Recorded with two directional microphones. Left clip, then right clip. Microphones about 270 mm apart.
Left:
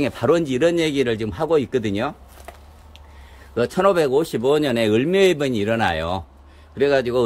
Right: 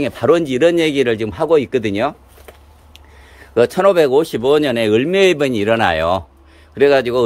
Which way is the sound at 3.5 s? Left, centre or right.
Centre.